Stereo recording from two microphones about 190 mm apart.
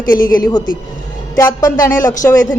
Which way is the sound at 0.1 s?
20° left (ahead or behind).